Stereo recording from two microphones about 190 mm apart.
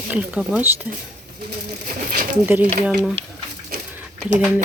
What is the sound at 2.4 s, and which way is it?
Speech, 10° right (ahead or behind).